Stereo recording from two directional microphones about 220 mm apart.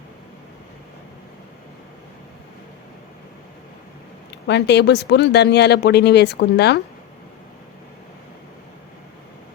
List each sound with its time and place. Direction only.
4.3 s speech: 50° left (ahead or behind)